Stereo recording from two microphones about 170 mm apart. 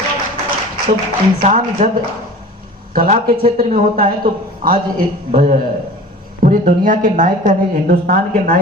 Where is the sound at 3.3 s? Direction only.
55° right (ahead or behind).